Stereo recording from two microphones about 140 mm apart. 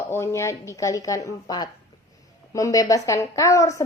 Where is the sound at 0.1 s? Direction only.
20° left (ahead or behind).